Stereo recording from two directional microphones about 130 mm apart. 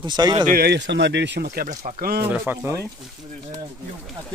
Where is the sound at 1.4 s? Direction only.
85° right.